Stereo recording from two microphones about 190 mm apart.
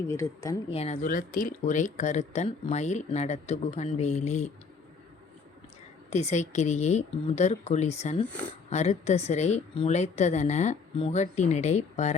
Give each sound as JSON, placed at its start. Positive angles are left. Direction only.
{"t": 0.1, "sound": "speech", "side_deg": 15}
{"t": 0.7, "sound": "speech", "side_deg": 30}
{"t": 1.0, "sound": "speech", "side_deg": 45}
{"t": 6.1, "sound": "speech", "side_deg": 35}